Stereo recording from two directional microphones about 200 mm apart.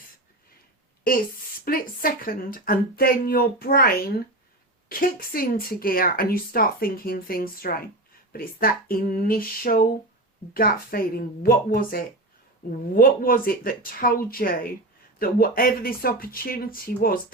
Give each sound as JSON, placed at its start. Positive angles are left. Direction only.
{"t": 1.1, "sound": "speech", "side_deg": 45}